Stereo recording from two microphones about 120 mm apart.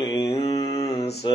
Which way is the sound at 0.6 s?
30° left (ahead or behind).